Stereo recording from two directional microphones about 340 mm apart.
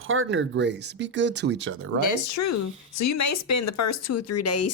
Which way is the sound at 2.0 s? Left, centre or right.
Left.